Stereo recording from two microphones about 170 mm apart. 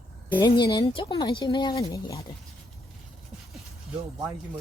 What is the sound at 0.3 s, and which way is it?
A woman's voice, 25° left (ahead or behind).